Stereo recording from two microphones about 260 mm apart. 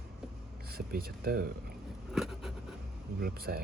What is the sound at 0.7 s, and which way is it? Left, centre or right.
Speech, right.